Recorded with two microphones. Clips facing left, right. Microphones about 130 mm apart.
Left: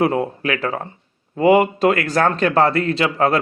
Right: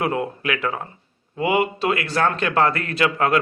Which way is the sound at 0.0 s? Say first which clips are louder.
Left 5 dB; 30° left (ahead or behind).